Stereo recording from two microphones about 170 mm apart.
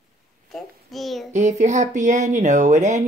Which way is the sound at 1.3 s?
45° right (ahead or behind).